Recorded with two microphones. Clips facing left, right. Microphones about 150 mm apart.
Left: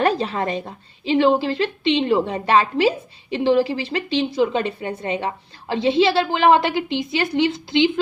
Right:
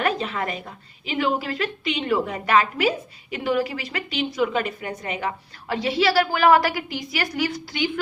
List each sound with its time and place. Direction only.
0.0 s a woman's voice: 35° left (ahead or behind)